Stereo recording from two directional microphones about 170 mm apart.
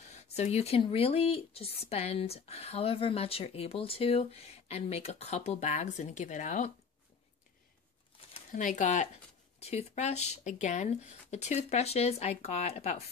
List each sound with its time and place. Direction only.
0.4 s speech: 35° left (ahead or behind)
8.5 s speech: 50° left (ahead or behind)